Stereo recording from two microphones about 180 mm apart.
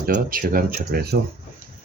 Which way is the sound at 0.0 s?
55° right (ahead or behind).